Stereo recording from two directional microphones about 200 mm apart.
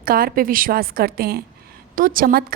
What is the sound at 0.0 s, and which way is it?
A woman's voice, 45° right (ahead or behind).